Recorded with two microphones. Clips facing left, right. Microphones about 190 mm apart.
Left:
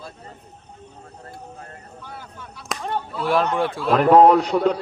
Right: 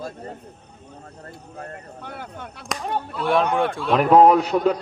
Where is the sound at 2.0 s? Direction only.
60° right (ahead or behind).